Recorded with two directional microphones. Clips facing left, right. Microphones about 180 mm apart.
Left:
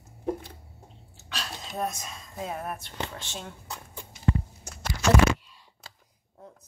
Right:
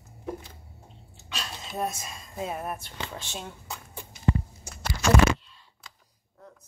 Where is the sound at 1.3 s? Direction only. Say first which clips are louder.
Even; centre (ahead or behind).